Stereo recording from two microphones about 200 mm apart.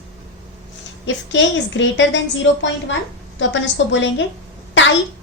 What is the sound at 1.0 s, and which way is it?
A woman's voice, 65° left (ahead or behind).